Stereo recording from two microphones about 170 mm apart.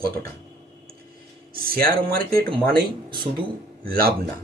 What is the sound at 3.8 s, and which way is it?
Speech, 60° right (ahead or behind).